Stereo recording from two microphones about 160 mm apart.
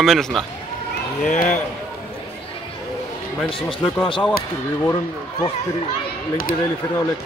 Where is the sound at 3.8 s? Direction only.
30° left (ahead or behind).